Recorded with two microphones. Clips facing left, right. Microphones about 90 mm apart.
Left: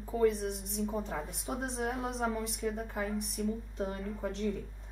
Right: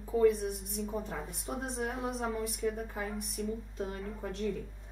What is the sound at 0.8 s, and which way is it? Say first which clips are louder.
Speech: left 4 dB; 40° left (ahead or behind).